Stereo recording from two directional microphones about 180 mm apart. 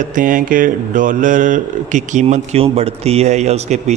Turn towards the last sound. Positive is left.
turn(degrees=-40)  # may be behind; listen again after turning